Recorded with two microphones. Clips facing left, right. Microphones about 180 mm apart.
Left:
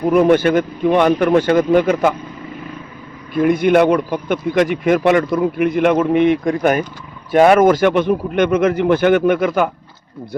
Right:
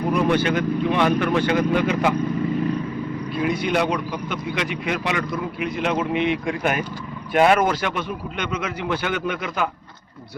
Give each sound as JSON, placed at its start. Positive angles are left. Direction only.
{"t": 0.1, "sound": "a man's voice", "side_deg": 50}
{"t": 3.3, "sound": "a man's voice", "side_deg": 50}